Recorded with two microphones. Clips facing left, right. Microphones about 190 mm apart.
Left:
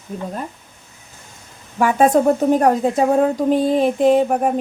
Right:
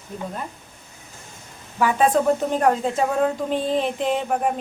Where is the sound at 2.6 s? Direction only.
40° left (ahead or behind).